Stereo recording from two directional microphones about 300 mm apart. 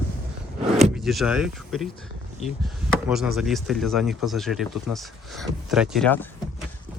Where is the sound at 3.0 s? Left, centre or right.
Centre.